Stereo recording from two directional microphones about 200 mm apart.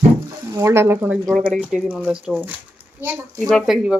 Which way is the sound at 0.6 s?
15° right (ahead or behind).